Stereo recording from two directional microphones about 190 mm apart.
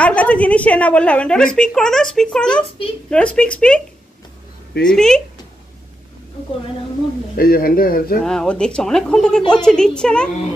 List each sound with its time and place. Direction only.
0.0 s a woman's voice: 5° left (ahead or behind)
4.8 s a woman's voice: 5° left (ahead or behind)
7.3 s a man's voice: 50° left (ahead or behind)
8.2 s a woman's voice: 5° left (ahead or behind)